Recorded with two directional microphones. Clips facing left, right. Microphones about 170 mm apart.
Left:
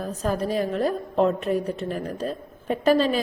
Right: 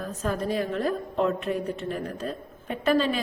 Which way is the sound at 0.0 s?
35° left (ahead or behind).